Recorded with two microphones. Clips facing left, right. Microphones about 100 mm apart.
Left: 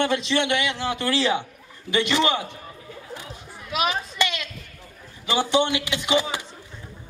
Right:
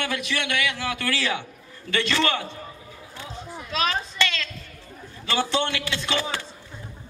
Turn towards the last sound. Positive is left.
turn(degrees=15)  # may be behind; listen again after turning